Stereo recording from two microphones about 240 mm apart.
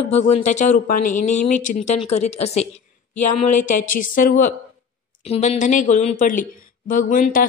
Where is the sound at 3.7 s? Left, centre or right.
Left.